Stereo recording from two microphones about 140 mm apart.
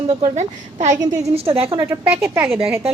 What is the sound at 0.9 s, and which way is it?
Speech, 25° right (ahead or behind).